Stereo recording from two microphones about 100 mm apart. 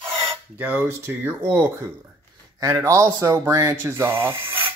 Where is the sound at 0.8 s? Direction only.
25° right (ahead or behind).